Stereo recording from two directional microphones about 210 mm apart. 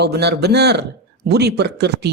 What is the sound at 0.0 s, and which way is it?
Speech, 50° right (ahead or behind).